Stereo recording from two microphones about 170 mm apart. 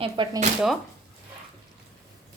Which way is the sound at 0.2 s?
30° right (ahead or behind).